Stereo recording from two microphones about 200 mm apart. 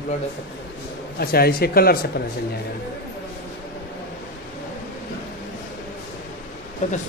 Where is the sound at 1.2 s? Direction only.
50° left (ahead or behind).